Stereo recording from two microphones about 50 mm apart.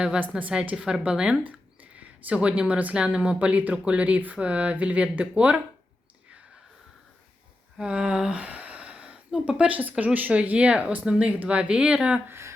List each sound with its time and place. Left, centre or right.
0.2 s speech: right
0.7 s speech: centre
1.5 s a sound: right
3.0 s speech: right
7.8 s speech: right
12.3 s a sound: right